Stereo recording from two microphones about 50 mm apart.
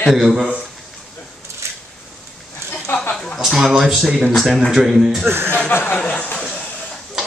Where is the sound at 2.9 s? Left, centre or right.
Left.